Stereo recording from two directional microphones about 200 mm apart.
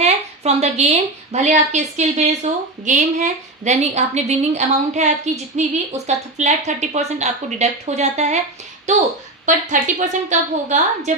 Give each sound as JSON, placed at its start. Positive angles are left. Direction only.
{"t": 0.0, "sound": "a woman's voice", "side_deg": -35}